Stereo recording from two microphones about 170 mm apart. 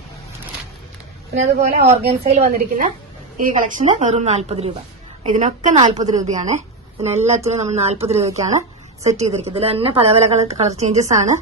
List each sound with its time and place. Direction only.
1.3 s a woman's voice: 40° right (ahead or behind)
2.5 s a woman's voice: 55° right (ahead or behind)